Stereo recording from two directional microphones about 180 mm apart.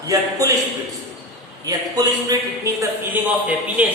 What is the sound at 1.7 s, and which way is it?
Speech, 20° right (ahead or behind).